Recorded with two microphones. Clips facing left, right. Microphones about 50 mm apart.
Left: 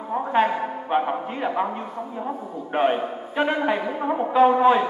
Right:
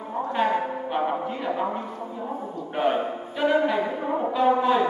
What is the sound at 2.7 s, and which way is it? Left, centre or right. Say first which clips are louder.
A woman's voice: left 2 dB; left.